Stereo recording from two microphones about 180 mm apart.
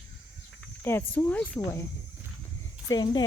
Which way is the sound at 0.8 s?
10° left (ahead or behind).